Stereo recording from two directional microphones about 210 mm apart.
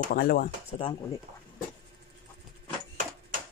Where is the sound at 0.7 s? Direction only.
25° left (ahead or behind).